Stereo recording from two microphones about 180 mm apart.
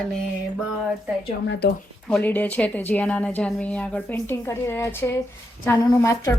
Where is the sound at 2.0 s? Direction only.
5° left (ahead or behind).